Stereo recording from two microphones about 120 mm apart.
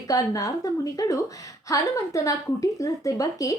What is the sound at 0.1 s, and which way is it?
A woman's voice, 30° left (ahead or behind).